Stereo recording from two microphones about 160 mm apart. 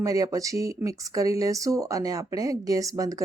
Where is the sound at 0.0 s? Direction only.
20° right (ahead or behind).